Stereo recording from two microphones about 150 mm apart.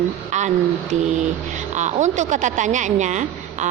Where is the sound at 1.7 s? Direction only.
55° right (ahead or behind).